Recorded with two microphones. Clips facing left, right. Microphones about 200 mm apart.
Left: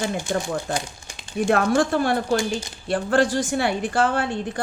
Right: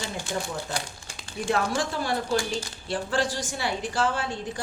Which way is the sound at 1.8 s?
55° left (ahead or behind).